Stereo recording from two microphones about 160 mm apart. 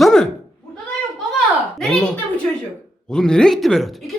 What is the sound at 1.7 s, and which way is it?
A woman's voice, 5° left (ahead or behind).